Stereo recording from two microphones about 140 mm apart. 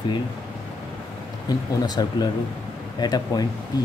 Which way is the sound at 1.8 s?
30° left (ahead or behind).